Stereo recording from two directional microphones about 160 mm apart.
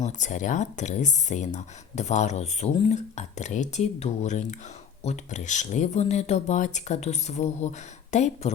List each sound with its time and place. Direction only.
0.0 s speech: 50° left (ahead or behind)